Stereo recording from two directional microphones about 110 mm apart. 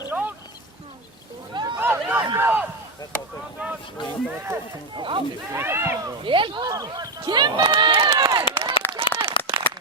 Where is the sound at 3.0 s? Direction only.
35° left (ahead or behind).